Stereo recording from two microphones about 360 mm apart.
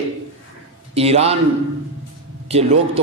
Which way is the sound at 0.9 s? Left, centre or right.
Centre.